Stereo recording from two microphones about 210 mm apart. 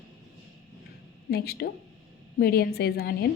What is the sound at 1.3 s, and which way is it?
A woman's voice, 50° left (ahead or behind).